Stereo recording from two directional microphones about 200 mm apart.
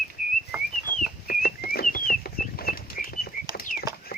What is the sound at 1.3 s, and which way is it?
Bird flight, 50° left (ahead or behind).